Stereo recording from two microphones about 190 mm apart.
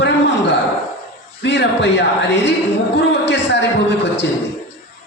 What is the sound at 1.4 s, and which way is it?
A man's voice, 65° left (ahead or behind).